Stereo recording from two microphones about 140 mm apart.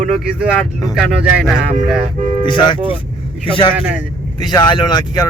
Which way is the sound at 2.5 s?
35° left (ahead or behind).